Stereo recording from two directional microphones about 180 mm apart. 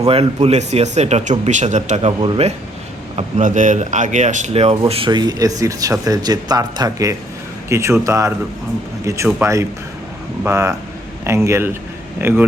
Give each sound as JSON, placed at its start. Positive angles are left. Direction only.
{"t": 0.0, "sound": "a man's voice", "side_deg": -35}